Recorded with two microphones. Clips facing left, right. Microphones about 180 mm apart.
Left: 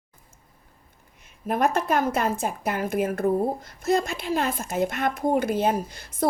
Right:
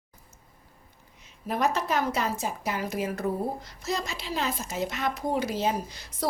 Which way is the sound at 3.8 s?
55° left (ahead or behind).